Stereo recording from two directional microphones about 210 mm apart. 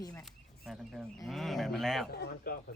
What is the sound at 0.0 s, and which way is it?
Speech, 15° left (ahead or behind).